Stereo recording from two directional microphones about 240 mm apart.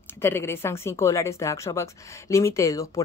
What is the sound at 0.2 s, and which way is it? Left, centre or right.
A woman's voice, centre.